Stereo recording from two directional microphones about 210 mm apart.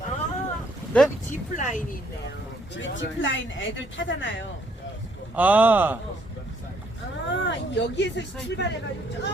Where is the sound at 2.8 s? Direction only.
65° left (ahead or behind).